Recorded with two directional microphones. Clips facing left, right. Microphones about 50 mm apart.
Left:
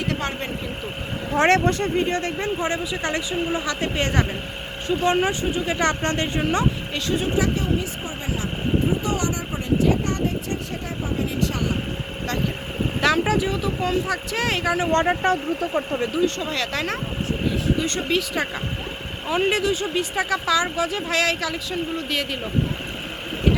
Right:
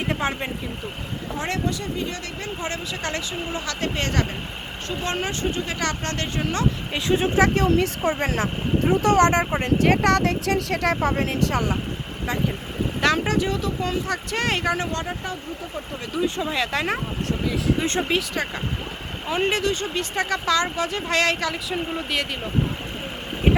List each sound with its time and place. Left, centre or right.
0.1 s speech: centre
1.4 s speech: left; by 5.8 s centre
5.8 s speech: left
7.3 s speech: right
13.0 s speech: centre
14.9 s speech: left
16.2 s speech: centre
17.7 s speech: right
18.4 s speech: centre
19.3 s speech: centre